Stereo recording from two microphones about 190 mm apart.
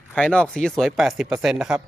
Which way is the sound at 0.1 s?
5° left (ahead or behind).